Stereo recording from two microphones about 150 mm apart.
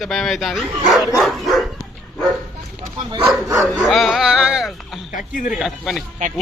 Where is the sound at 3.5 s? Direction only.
Centre (ahead or behind).